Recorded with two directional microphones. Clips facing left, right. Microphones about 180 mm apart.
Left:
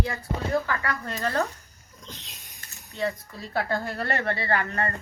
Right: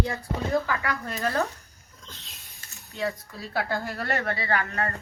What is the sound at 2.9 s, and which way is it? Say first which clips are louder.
Speech: left 1 dB; centre (ahead or behind).